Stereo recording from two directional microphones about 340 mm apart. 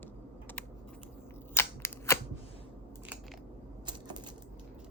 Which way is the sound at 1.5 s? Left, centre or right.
Centre.